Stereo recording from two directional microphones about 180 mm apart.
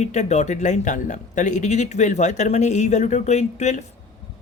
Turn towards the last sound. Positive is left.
turn(degrees=40)  # may be behind; listen again after turning